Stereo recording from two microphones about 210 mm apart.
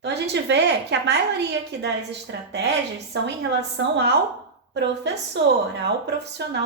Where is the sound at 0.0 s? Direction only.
55° right (ahead or behind).